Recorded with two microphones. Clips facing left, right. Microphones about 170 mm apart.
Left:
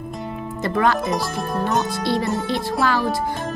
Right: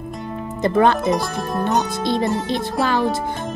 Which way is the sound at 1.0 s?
Centre (ahead or behind).